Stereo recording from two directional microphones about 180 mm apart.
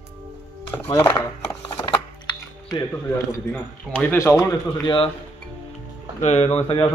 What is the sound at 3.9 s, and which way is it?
A man's voice, 15° left (ahead or behind).